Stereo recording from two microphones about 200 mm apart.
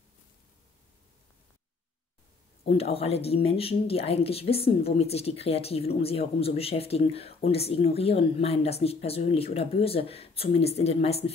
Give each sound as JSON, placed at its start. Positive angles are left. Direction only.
{"t": 2.6, "sound": "speech", "side_deg": 30}